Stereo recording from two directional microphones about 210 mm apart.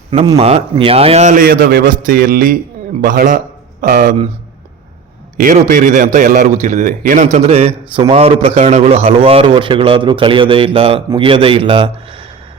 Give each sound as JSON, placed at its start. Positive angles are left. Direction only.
{"t": 0.3, "sound": "a man's voice", "side_deg": -30}
{"t": 5.4, "sound": "a man's voice", "side_deg": -40}